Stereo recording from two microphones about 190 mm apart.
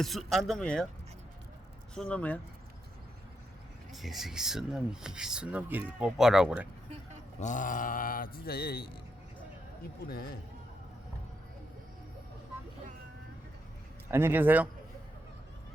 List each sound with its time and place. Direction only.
0.0 s speech: centre (ahead or behind)
2.0 s speech: 5° left (ahead or behind)
3.9 s speech: centre (ahead or behind)
7.3 s speech: 40° left (ahead or behind)
10.1 s speech: 50° left (ahead or behind)
14.1 s a man's voice: 10° right (ahead or behind)